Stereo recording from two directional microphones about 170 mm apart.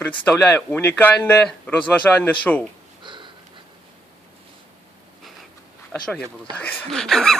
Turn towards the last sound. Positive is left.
turn(degrees=5)  # may be behind; listen again after turning